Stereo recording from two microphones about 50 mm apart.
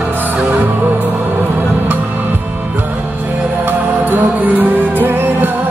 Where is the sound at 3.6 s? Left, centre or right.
Right.